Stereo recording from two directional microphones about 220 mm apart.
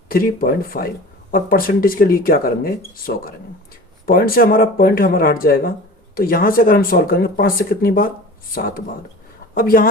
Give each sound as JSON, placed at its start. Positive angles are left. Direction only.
{"t": 0.1, "sound": "speech", "side_deg": 40}